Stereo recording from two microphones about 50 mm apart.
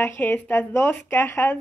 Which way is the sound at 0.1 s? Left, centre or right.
Left.